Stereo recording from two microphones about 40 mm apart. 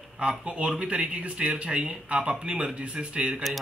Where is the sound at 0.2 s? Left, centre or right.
Right.